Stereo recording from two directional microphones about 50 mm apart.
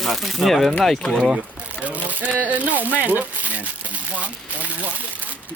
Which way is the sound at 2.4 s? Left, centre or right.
Right.